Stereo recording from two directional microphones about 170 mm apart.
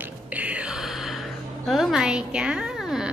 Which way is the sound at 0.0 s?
10° right (ahead or behind).